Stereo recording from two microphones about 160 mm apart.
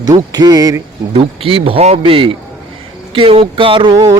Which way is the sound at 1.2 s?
35° right (ahead or behind).